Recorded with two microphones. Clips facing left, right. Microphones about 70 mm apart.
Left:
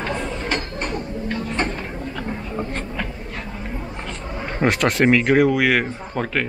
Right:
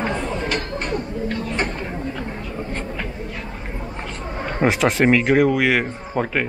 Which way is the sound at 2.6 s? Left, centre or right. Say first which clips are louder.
Right 2 dB; centre.